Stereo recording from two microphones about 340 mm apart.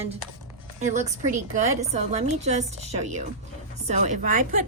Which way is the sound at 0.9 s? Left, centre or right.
Right.